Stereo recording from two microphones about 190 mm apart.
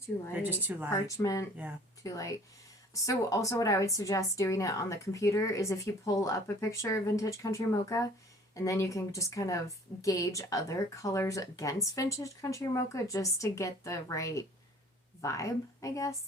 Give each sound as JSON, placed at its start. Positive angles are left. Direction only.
{"t": 0.3, "sound": "a woman's voice", "side_deg": -10}
{"t": 1.0, "sound": "a woman's voice", "side_deg": 20}